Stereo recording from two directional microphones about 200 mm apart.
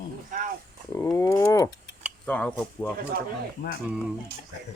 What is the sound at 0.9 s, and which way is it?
Speech, 15° left (ahead or behind).